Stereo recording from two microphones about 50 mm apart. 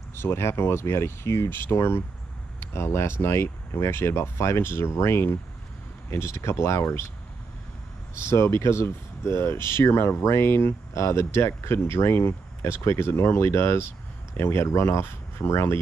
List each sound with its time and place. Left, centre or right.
0.1 s speech: left
8.1 s speech: left